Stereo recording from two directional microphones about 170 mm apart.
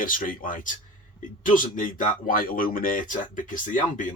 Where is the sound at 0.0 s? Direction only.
55° left (ahead or behind).